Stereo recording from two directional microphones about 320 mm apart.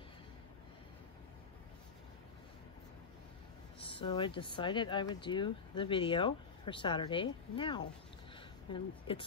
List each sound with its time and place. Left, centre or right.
3.8 s speech: centre